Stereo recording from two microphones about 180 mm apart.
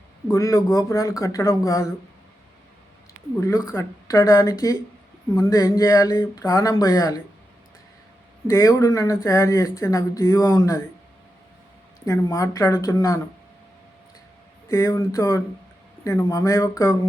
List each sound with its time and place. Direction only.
0.3 s speech: 20° left (ahead or behind)
3.4 s speech: 15° left (ahead or behind)
8.4 s speech: 20° left (ahead or behind)
12.0 s speech: 15° left (ahead or behind)
14.7 s speech: 15° left (ahead or behind)